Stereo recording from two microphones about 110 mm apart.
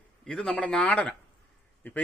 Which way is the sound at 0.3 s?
5° left (ahead or behind).